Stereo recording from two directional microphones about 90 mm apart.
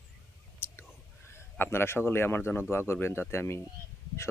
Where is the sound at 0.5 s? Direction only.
25° left (ahead or behind).